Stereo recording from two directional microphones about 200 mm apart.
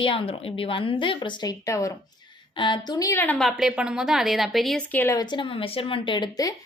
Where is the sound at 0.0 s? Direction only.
25° left (ahead or behind).